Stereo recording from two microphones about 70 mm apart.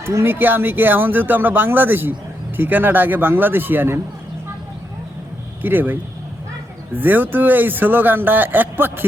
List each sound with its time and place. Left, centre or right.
0.0 s speech: right
5.6 s speech: right